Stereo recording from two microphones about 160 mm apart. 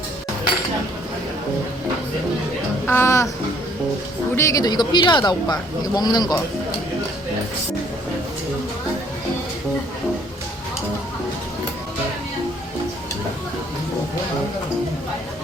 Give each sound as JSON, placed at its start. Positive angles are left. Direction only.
{"t": 2.8, "sound": "speech", "side_deg": 15}
{"t": 4.4, "sound": "speech", "side_deg": 20}